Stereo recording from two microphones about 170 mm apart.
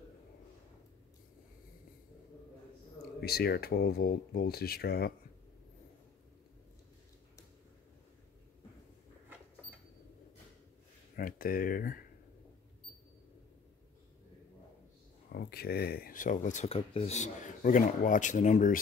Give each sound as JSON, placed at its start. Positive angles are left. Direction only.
{"t": 3.2, "sound": "speech", "side_deg": 65}
{"t": 11.1, "sound": "speech", "side_deg": 55}
{"t": 15.3, "sound": "speech", "side_deg": 65}